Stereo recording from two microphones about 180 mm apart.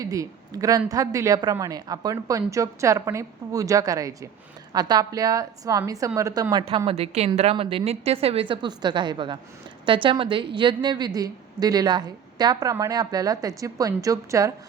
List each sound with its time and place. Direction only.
0.0 s a woman's voice: 20° right (ahead or behind)